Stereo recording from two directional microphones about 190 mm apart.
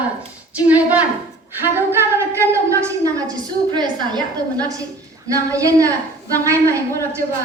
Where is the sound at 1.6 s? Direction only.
10° right (ahead or behind).